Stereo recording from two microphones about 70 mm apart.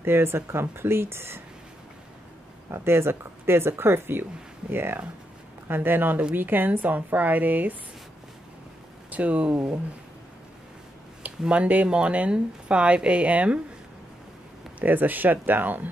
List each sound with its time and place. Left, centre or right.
0.0 s speech: right
2.7 s speech: right
9.1 s speech: centre
11.2 s speech: centre
14.8 s speech: right